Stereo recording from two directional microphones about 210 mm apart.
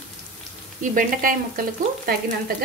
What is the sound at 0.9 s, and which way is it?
Frying, 40° right (ahead or behind).